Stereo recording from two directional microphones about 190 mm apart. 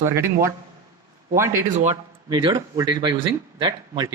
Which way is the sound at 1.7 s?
40° right (ahead or behind).